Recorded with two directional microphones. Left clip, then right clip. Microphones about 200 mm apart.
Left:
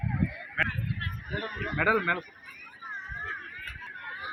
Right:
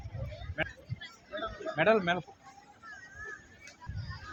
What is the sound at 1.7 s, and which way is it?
Speech, 50° right (ahead or behind).